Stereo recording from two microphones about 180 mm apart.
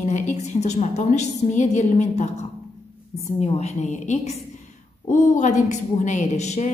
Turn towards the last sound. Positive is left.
turn(degrees=40)  # may be behind; listen again after turning